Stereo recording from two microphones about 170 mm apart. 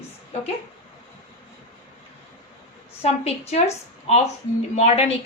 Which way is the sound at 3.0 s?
40° left (ahead or behind).